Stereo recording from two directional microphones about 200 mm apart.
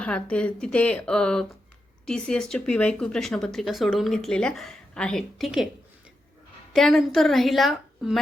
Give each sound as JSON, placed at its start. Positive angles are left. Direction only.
{"t": 0.0, "sound": "speech", "side_deg": 5}
{"t": 6.7, "sound": "speech", "side_deg": 0}